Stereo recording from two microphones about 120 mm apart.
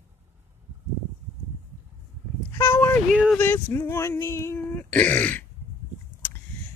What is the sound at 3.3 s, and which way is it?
Speech, 20° left (ahead or behind).